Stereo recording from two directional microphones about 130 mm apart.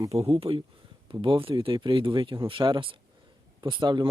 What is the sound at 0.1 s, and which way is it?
Speech, 45° right (ahead or behind).